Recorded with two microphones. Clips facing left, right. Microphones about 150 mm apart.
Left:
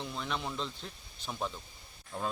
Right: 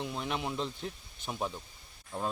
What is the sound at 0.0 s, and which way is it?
Speech, 10° right (ahead or behind).